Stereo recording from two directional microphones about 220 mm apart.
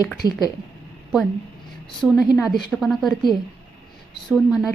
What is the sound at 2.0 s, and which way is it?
A woman's voice, centre (ahead or behind).